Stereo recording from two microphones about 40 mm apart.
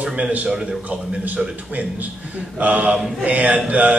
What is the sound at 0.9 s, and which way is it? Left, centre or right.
A man's voice, right.